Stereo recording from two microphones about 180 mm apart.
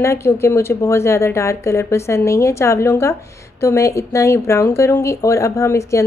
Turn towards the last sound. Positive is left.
turn(degrees=15)  # may be behind; listen again after turning